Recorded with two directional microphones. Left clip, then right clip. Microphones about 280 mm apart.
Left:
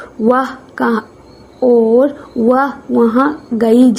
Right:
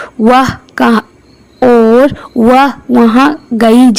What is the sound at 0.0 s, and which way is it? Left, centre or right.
A woman's voice, right.